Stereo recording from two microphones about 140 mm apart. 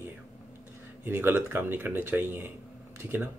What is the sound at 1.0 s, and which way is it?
Speech, 15° right (ahead or behind).